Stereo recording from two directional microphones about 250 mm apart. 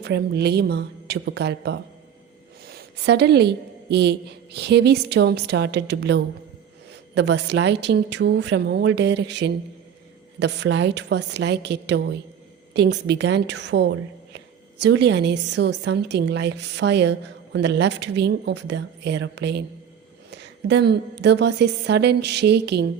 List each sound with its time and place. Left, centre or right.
0.0 s a woman's voice: right